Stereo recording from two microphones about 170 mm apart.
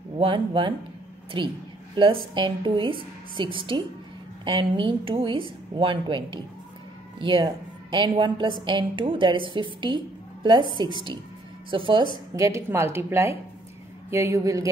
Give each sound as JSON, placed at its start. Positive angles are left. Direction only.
{"t": 0.2, "sound": "a woman's voice", "side_deg": -30}
{"t": 12.4, "sound": "a woman's voice", "side_deg": -15}